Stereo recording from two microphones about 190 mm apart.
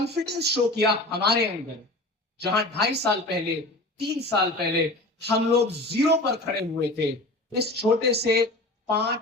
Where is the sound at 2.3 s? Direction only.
60° right (ahead or behind).